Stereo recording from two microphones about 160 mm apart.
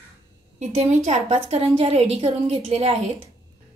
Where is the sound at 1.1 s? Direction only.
40° right (ahead or behind).